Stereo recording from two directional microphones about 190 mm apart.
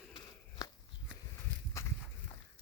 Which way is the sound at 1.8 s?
15° left (ahead or behind).